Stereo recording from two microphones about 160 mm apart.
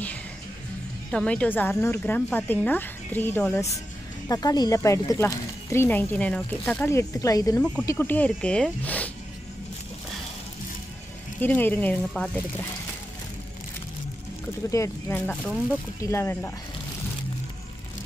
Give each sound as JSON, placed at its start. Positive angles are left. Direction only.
{"t": 1.1, "sound": "a woman's voice", "side_deg": 5}
{"t": 4.3, "sound": "a woman's voice", "side_deg": 25}
{"t": 11.4, "sound": "a woman's voice", "side_deg": 10}
{"t": 14.7, "sound": "a woman's voice", "side_deg": 15}